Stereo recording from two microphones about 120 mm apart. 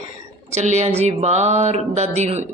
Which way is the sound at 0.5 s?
75° right (ahead or behind).